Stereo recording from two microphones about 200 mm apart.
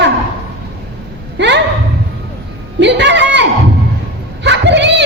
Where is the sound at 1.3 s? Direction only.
60° right (ahead or behind).